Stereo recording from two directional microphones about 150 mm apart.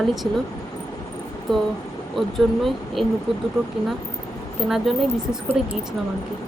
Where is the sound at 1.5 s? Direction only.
Centre (ahead or behind).